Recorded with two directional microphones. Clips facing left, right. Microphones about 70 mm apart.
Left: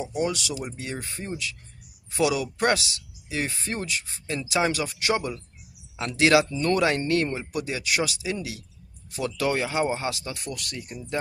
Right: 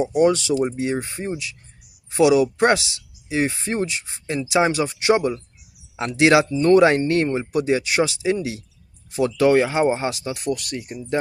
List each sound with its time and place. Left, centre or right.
0.1 s speech: right